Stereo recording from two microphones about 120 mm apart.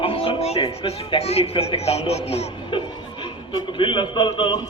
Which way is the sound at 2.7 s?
45° left (ahead or behind).